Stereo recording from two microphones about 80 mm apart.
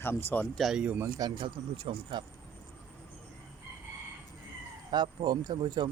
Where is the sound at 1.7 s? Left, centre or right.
Right.